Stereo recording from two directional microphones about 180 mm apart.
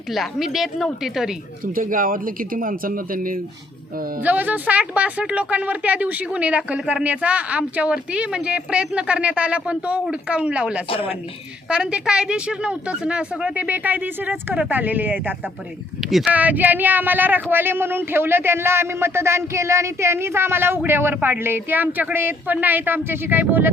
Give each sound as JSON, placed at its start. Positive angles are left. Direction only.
{"t": 0.1, "sound": "a woman's voice", "side_deg": 0}
{"t": 1.7, "sound": "a man's voice", "side_deg": -50}
{"t": 4.2, "sound": "speech", "side_deg": -10}
{"t": 10.8, "sound": "speech", "side_deg": 30}
{"t": 11.7, "sound": "speech", "side_deg": -5}